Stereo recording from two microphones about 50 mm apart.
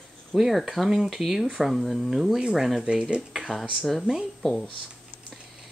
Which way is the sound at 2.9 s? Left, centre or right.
Centre.